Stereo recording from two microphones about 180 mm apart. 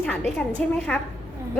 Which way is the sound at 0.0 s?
5° left (ahead or behind).